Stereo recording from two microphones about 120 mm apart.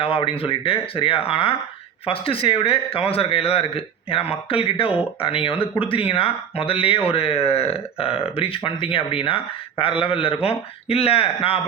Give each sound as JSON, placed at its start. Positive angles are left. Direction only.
{"t": 0.0, "sound": "speech", "side_deg": 50}